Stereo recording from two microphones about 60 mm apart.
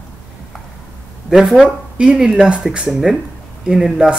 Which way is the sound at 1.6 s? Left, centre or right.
Centre.